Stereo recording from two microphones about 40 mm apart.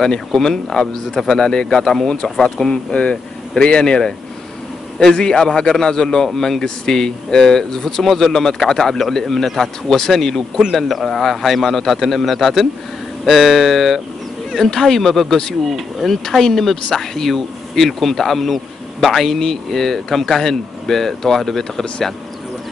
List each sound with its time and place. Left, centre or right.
0.3 s speech: centre
2.7 s speech: left
5.1 s a man's voice: left